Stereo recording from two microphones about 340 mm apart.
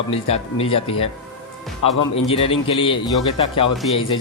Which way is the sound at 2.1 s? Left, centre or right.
Centre.